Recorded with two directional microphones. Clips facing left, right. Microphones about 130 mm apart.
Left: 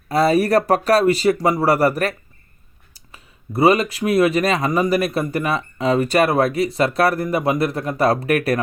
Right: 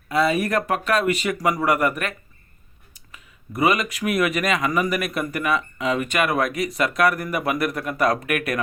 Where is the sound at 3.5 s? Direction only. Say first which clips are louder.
Left 5 dB; 30° left (ahead or behind).